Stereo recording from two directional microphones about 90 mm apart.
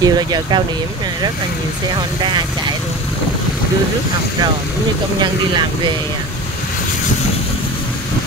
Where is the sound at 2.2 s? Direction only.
55° right (ahead or behind).